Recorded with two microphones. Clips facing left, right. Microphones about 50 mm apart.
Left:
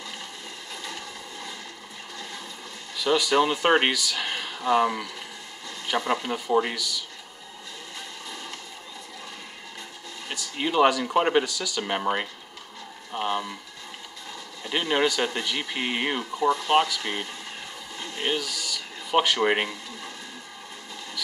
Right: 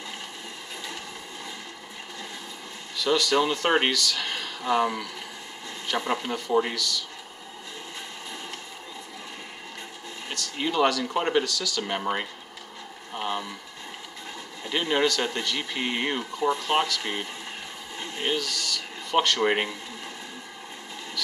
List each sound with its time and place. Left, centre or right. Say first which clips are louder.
3.0 s speech: left 1 dB; centre
10.3 s speech: left 2 dB; centre
14.7 s speech: even; centre
17.9 s a sound: right 1 dB; right
18.3 s speech: right 1 dB; centre